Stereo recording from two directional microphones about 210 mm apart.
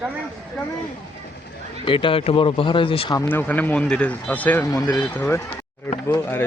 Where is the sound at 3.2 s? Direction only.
10° left (ahead or behind).